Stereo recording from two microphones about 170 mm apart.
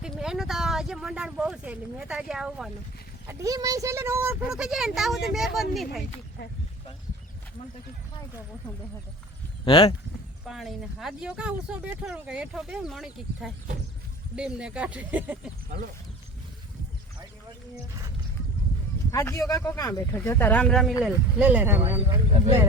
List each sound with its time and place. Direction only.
0.0 s speech: 5° right (ahead or behind)
3.2 s speech: 20° right (ahead or behind)
4.5 s speech: 5° right (ahead or behind)
9.6 s speech: 30° left (ahead or behind)
10.4 s speech: centre (ahead or behind)
19.1 s speech: 20° left (ahead or behind)
21.0 s speech: 5° right (ahead or behind)